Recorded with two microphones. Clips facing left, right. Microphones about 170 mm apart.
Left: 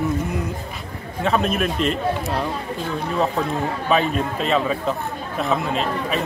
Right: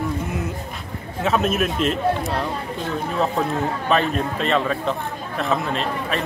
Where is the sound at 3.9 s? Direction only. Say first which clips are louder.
Left 1 dB; centre (ahead or behind).